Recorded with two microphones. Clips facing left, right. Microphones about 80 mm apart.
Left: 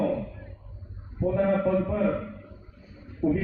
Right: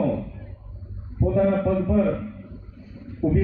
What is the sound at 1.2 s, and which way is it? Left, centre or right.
A man's voice, centre.